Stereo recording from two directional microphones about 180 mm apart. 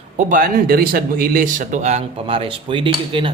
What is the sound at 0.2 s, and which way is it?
Speech, 50° right (ahead or behind).